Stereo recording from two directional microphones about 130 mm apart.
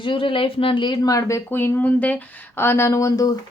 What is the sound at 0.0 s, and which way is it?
Speech, 40° left (ahead or behind).